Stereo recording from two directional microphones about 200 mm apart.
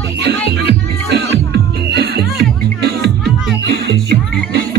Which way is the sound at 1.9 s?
55° right (ahead or behind).